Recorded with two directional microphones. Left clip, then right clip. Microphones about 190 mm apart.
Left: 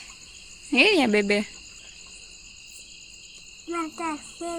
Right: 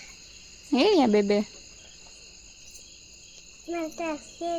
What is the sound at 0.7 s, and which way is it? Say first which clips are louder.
Speech: left 2 dB; 10° right (ahead or behind).